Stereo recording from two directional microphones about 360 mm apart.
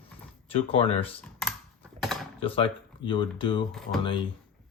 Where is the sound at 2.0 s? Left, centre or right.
Centre.